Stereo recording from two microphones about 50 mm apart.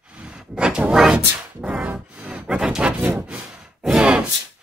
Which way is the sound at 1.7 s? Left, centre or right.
Right.